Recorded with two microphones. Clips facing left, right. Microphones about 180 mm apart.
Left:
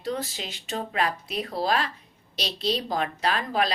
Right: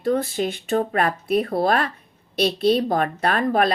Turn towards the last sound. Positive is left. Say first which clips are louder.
# right 6 dB
turn(degrees=-55)  # may be behind; listen again after turning